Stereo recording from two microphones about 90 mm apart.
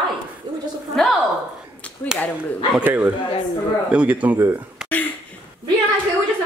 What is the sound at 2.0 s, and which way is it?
Speech, 20° left (ahead or behind).